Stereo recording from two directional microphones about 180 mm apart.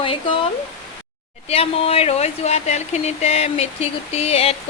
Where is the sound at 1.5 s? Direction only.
30° left (ahead or behind).